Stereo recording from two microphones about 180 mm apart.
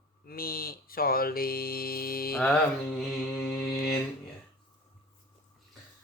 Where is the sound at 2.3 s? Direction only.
5° left (ahead or behind).